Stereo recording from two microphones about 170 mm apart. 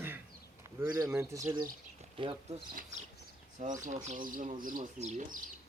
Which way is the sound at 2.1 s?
30° right (ahead or behind).